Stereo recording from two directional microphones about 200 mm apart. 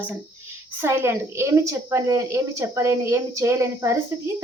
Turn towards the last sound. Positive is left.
turn(degrees=-15)  # may be behind; listen again after turning